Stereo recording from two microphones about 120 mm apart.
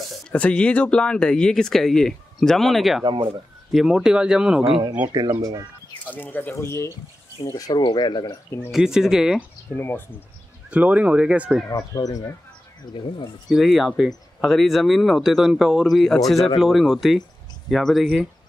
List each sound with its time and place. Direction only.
0.3 s speech: 10° left (ahead or behind)
3.1 s speech: 45° right (ahead or behind)
3.7 s speech: 5° right (ahead or behind)
5.1 s speech: 35° right (ahead or behind)
6.0 s speech: 15° left (ahead or behind); by 8.4 s 35° left (ahead or behind)
8.7 s speech: 5° right (ahead or behind)
9.8 s speech: 15° left (ahead or behind)
10.7 s speech: 10° right (ahead or behind)
11.7 s speech: 30° left (ahead or behind)
13.5 s speech: centre (ahead or behind)